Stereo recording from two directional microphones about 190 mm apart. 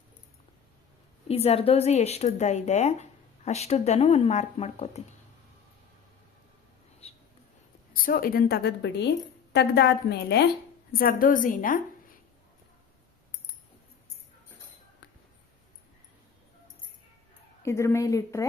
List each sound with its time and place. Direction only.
1.3 s speech: 30° left (ahead or behind)
7.0 s a sound: 30° left (ahead or behind)
8.0 s a woman's voice: 50° left (ahead or behind)
10.9 s a woman's voice: 50° left (ahead or behind)
17.6 s speech: 15° left (ahead or behind)